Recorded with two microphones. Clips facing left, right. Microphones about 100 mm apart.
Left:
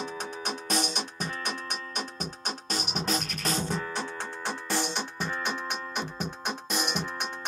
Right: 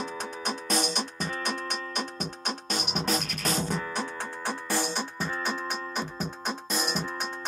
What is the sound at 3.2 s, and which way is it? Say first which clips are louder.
Music: right 1 dB; 35° left (ahead or behind).